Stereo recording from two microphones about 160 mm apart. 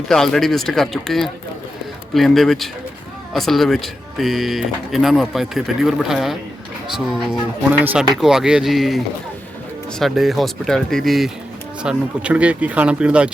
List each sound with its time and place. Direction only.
0.1 s speech: 5° left (ahead or behind)